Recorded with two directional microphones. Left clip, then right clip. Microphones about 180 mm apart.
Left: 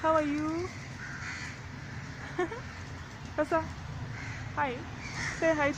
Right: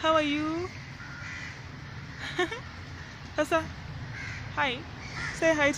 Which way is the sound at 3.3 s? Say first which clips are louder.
Right 2 dB; 20° right (ahead or behind).